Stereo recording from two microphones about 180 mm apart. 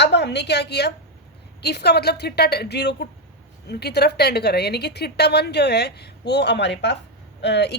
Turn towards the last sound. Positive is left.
turn(degrees=70)  # may be behind; listen again after turning